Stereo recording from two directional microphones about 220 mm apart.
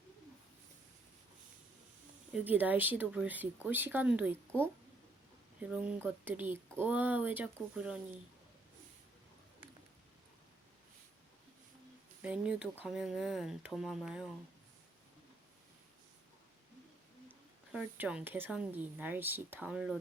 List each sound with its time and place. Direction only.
2.3 s a woman's voice: 10° right (ahead or behind)
5.5 s a woman's voice: 5° right (ahead or behind)
12.2 s speech: 5° right (ahead or behind)
17.2 s a woman's voice: centre (ahead or behind)